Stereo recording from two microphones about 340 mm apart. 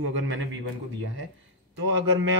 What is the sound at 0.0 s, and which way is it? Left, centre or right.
Speech, right.